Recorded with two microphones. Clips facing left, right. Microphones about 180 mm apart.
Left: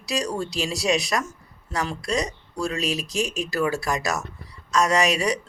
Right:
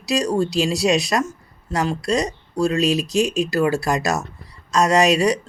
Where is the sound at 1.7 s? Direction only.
30° right (ahead or behind).